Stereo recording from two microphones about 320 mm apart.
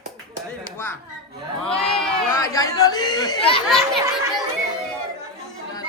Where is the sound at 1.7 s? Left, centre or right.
Centre.